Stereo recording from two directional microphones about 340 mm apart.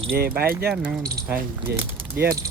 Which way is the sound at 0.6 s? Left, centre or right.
Centre.